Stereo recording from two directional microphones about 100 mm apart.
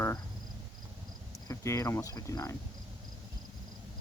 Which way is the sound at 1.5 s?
30° left (ahead or behind).